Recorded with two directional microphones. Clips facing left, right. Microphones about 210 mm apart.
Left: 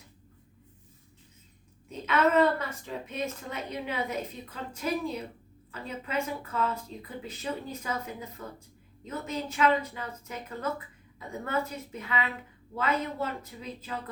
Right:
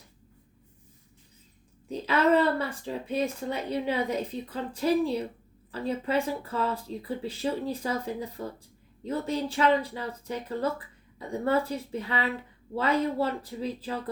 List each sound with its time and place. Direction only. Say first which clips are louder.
1.9 s a woman's voice: right 2 dB; 35° right (ahead or behind)